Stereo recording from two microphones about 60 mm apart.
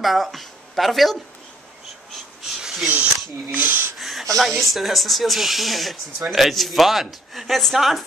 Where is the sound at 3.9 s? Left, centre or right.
Centre.